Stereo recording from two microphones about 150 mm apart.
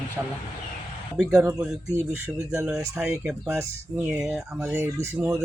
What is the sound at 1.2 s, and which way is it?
Speech, 5° right (ahead or behind).